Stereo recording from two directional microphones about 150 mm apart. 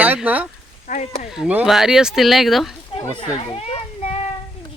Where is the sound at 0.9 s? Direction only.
60° left (ahead or behind).